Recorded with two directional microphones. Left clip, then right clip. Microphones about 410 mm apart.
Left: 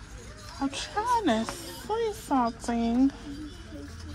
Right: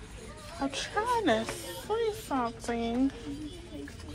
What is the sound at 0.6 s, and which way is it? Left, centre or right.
Speech, centre.